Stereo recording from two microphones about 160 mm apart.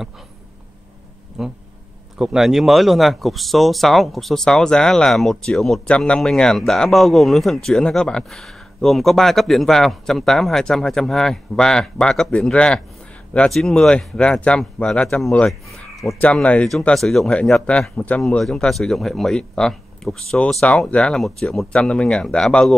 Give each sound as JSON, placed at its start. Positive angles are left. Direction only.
{"t": 1.4, "sound": "speech", "side_deg": 0}